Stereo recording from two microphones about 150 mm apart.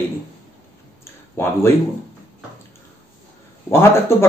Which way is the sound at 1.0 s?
20° left (ahead or behind).